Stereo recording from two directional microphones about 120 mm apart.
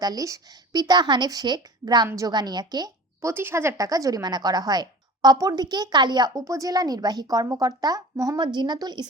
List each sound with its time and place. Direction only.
0.0 s a woman's voice: 30° right (ahead or behind)